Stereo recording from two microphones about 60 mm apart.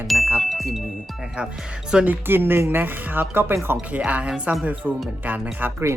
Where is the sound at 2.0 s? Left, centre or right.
Right.